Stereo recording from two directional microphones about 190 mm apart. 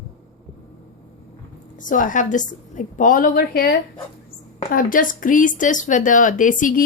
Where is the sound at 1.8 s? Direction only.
45° left (ahead or behind).